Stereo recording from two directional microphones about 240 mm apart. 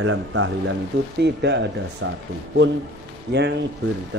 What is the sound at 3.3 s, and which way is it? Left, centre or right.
Speech, right.